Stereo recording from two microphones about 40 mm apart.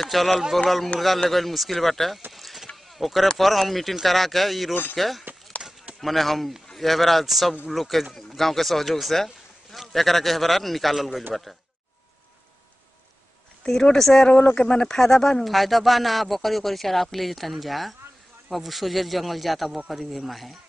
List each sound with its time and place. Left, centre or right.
0.0 s speech: centre
2.3 s vehicle: centre
3.3 s speech: centre
5.6 s a sound: right
5.9 s a man's voice: centre
13.7 s speech: centre
14.2 s speech: left
15.0 s speech: centre
15.4 s speech: centre